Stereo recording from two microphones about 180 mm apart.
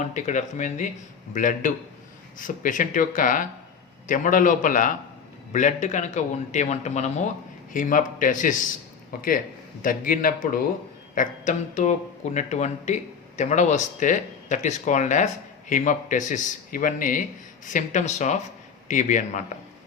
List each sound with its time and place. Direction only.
0.0 s a man's voice: 40° left (ahead or behind)